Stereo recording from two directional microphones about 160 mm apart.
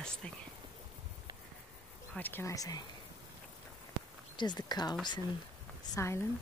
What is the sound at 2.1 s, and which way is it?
Speech, 10° left (ahead or behind).